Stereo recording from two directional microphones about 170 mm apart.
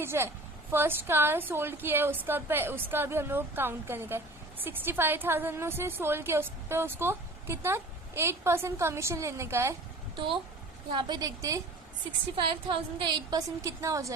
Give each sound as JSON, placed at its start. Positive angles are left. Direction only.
{"t": 0.0, "sound": "a woman's voice", "side_deg": -15}
{"t": 10.9, "sound": "a woman's voice", "side_deg": -20}